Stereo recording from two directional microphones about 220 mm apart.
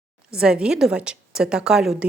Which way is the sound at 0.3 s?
5° right (ahead or behind).